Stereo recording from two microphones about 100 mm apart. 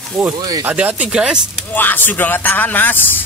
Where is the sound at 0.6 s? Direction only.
15° right (ahead or behind).